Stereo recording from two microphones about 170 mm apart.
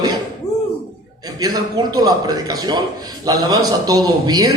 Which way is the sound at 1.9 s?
25° right (ahead or behind).